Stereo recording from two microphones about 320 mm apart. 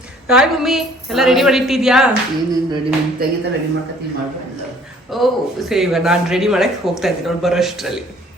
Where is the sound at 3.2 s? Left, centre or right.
Right.